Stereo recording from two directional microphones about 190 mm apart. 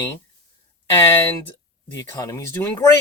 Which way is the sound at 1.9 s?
20° left (ahead or behind).